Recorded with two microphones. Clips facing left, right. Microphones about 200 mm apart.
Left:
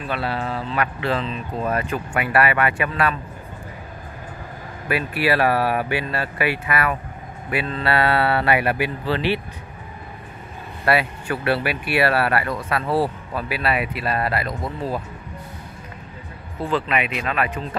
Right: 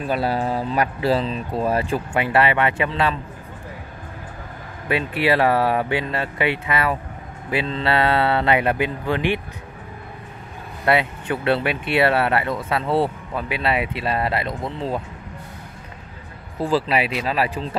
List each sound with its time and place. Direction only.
0.0 s speech: 40° right (ahead or behind); by 3.2 s 25° right (ahead or behind)
4.8 s speech: 20° right (ahead or behind)
10.9 s speech: 20° right (ahead or behind)
16.7 s speech: 30° right (ahead or behind)